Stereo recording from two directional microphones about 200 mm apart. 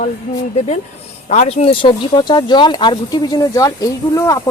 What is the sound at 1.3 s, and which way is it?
Speech, 35° left (ahead or behind).